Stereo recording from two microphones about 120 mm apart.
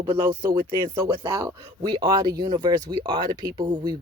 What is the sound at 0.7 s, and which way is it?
Speech, 25° right (ahead or behind).